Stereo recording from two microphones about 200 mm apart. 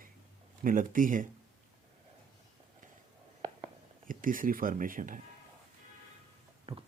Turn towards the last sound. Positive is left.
turn(degrees=-30)  # may be behind; listen again after turning